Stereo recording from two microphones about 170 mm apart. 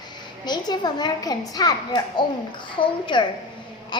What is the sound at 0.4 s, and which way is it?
Speech, 25° left (ahead or behind).